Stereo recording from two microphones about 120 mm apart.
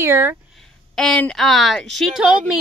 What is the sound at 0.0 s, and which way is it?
Speech, 20° right (ahead or behind).